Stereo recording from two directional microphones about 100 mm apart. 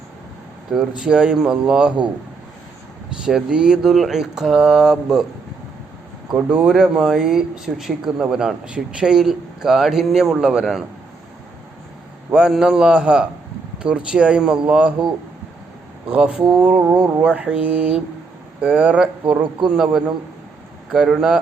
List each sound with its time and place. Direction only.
0.7 s speech: 5° right (ahead or behind)
3.2 s speech: 5° right (ahead or behind)
6.3 s speech: 10° right (ahead or behind)
12.3 s speech: 5° right (ahead or behind)
16.0 s speech: 10° right (ahead or behind)